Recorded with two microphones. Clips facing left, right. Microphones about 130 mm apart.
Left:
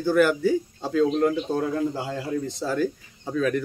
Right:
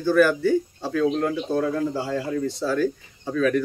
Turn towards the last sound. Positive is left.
turn(degrees=15)  # may be behind; listen again after turning